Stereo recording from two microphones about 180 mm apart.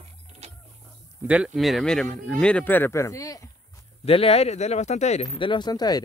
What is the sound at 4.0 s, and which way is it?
Speech, 35° left (ahead or behind).